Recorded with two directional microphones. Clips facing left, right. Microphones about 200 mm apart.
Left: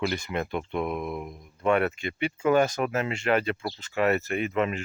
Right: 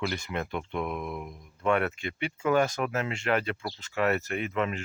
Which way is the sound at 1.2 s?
5° left (ahead or behind).